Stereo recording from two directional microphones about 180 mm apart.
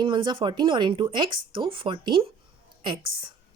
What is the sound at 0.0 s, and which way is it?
A woman's voice, 25° right (ahead or behind).